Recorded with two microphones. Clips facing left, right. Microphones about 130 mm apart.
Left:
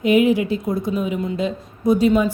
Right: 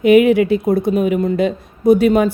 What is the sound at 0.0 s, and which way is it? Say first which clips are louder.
A woman's voice: right 6 dB; 65° right (ahead or behind).